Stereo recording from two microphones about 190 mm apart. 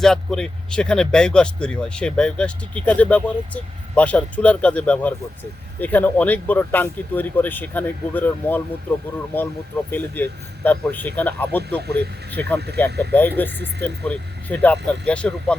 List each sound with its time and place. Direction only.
0.0 s speech: 5° left (ahead or behind)
11.8 s speech: 60° right (ahead or behind)
13.1 s speech: 10° left (ahead or behind)